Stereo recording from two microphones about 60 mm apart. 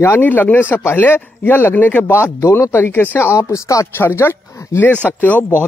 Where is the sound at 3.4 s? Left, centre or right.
Left.